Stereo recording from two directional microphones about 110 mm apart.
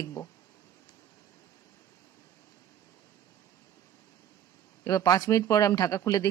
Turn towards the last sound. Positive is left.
turn(degrees=30)  # may be behind; listen again after turning